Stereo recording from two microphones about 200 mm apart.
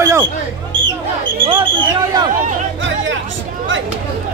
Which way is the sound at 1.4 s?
25° right (ahead or behind).